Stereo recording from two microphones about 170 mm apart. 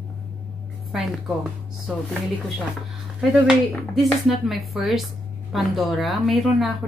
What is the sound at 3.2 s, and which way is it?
A woman's voice, 5° right (ahead or behind).